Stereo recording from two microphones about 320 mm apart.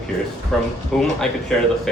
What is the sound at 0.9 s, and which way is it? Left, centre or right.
Speech, centre.